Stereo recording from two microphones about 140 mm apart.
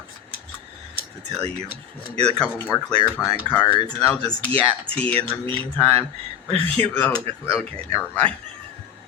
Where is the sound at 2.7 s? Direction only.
25° left (ahead or behind).